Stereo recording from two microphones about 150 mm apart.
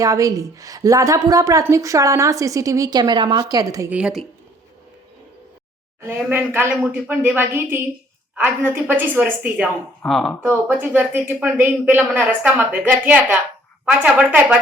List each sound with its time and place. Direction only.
0.0 s a woman's voice: 25° right (ahead or behind)
3.8 s a woman's voice: 5° right (ahead or behind)
6.0 s a woman's voice: 15° right (ahead or behind)
10.0 s speech: centre (ahead or behind)
10.5 s a woman's voice: 15° right (ahead or behind)